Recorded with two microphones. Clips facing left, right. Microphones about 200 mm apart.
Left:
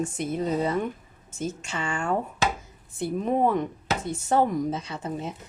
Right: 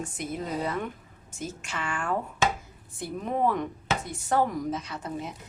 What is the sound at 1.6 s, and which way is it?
A woman's voice, 25° left (ahead or behind).